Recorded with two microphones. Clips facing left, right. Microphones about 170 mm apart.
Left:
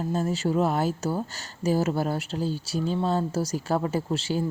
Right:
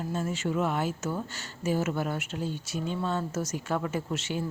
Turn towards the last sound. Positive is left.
turn(degrees=35)  # may be behind; listen again after turning